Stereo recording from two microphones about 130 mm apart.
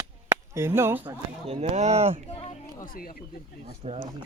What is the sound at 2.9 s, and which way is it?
Speech, 90° left.